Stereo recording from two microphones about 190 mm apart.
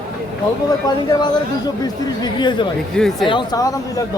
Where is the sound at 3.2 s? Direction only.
25° left (ahead or behind).